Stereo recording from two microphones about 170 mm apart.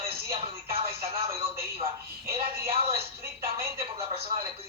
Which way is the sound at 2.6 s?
15° right (ahead or behind).